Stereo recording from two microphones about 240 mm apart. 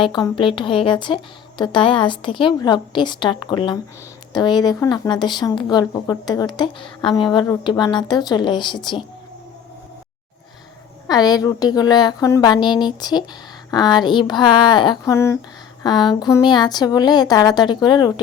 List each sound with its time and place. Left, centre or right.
0.0 s a woman's voice: centre
11.1 s speech: centre